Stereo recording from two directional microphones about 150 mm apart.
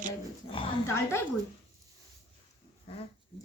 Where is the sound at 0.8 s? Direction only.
15° left (ahead or behind).